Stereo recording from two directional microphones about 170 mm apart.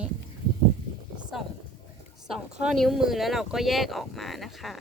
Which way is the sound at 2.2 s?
5° right (ahead or behind).